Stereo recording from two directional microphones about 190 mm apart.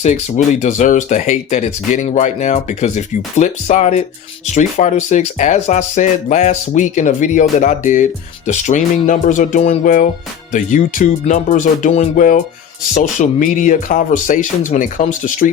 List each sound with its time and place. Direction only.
0.0 s speech: 35° left (ahead or behind)